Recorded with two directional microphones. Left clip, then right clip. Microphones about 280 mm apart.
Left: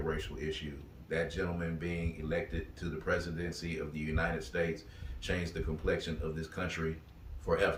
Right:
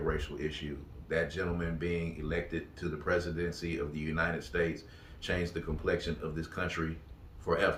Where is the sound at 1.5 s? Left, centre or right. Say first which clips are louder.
Right 4 dB; centre.